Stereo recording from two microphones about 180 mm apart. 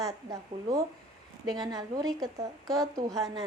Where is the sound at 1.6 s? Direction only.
20° right (ahead or behind).